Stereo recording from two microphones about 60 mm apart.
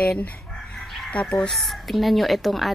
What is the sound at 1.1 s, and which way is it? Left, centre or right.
Speech, centre.